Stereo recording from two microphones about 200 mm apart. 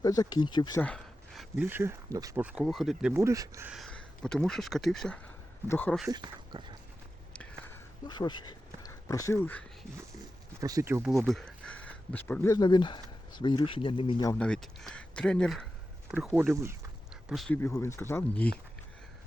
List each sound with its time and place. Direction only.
0.0 s speech: 20° left (ahead or behind)
0.8 s a sound: 5° left (ahead or behind)
1.6 s speech: 10° right (ahead or behind)
3.7 s speech: centre (ahead or behind)
6.1 s speech: 20° right (ahead or behind)
8.0 s speech: 20° left (ahead or behind)
10.6 s speech: 15° right (ahead or behind)
11.3 s speech: 5° left (ahead or behind); by 14.3 s 20° left (ahead or behind)
14.3 s speech: 5° left (ahead or behind)
16.1 s a sound: 5° right (ahead or behind)
17.3 s speech: 5° left (ahead or behind)